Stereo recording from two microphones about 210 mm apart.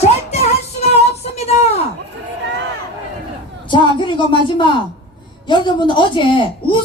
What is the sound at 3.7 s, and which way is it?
A woman's voice, 20° left (ahead or behind).